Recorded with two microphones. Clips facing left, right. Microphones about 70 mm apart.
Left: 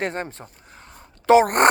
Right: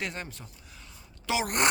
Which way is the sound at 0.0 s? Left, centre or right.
Left.